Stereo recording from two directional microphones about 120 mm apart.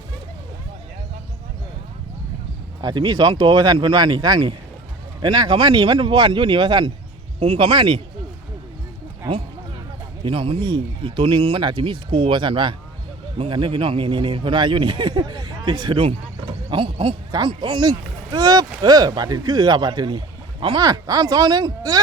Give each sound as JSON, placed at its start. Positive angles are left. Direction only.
{"t": 2.8, "sound": "speech", "side_deg": -35}
{"t": 7.3, "sound": "speech", "side_deg": -65}
{"t": 7.6, "sound": "speech", "side_deg": -40}
{"t": 10.2, "sound": "a man's voice", "side_deg": -50}